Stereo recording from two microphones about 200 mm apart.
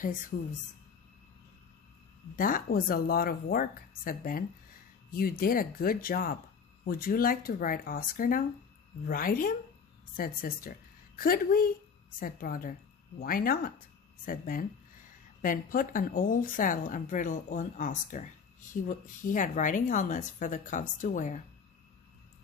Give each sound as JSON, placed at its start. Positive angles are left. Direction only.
{"t": 2.3, "sound": "a woman's voice", "side_deg": 45}